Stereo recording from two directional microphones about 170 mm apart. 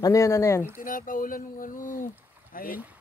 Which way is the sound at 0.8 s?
55° left (ahead or behind).